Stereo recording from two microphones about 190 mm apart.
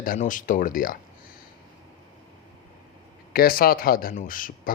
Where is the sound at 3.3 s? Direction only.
50° left (ahead or behind).